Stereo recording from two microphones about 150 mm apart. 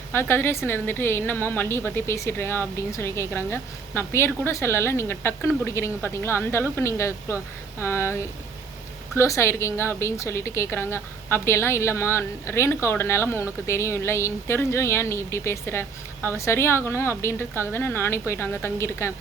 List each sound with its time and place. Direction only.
0.1 s a woman's voice: 15° left (ahead or behind)